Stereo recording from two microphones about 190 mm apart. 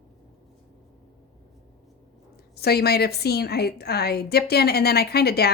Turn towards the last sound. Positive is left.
turn(degrees=55)  # may be behind; listen again after turning